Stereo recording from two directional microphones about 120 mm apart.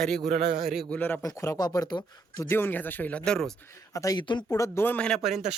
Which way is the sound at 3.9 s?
30° left (ahead or behind).